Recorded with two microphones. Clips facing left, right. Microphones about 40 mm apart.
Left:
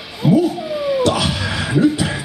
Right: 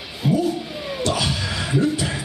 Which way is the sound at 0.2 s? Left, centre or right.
Centre.